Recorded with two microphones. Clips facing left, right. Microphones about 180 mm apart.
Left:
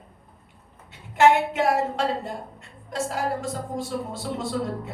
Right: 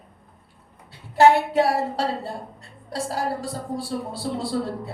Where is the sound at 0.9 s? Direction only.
35° right (ahead or behind).